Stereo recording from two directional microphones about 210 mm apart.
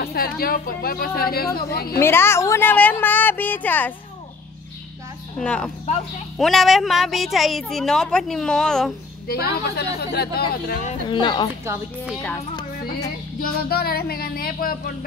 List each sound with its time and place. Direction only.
0.0 s speech: 45° left (ahead or behind)
2.0 s a woman's voice: 10° left (ahead or behind)
5.4 s a woman's voice: 5° left (ahead or behind)
9.3 s speech: 50° left (ahead or behind)
10.9 s speech: 25° left (ahead or behind)
12.1 s a woman's voice: 5° left (ahead or behind)
13.4 s speech: 45° left (ahead or behind)